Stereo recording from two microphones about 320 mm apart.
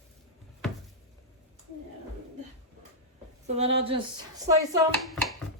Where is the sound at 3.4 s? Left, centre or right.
Centre.